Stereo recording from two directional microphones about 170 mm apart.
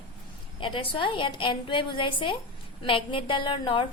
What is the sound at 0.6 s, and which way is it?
A woman's voice, 30° left (ahead or behind).